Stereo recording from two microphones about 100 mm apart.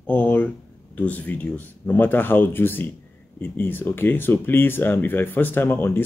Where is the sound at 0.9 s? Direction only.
15° left (ahead or behind).